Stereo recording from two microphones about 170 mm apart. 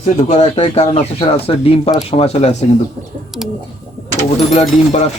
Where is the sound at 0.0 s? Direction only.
45° left (ahead or behind).